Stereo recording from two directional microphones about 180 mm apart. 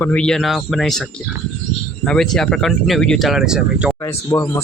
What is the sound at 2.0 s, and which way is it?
Speech, 5° left (ahead or behind).